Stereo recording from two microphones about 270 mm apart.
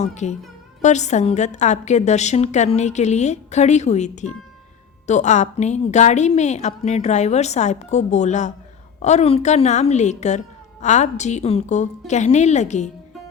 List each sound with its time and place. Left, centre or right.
0.0 s a woman's voice: left